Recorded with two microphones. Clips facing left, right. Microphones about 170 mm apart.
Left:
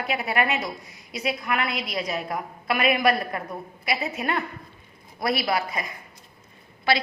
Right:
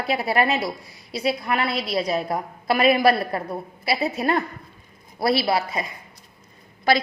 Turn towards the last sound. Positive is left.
turn(degrees=-45)  # may be behind; listen again after turning